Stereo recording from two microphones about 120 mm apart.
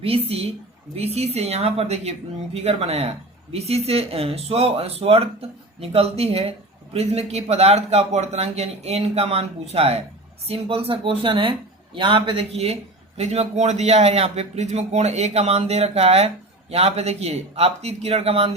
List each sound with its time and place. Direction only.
0.0 s a woman's voice: 55° right (ahead or behind)